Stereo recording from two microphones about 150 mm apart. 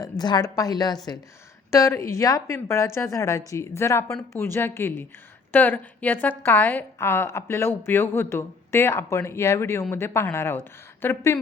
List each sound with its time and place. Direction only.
0.0 s a woman's voice: 25° left (ahead or behind)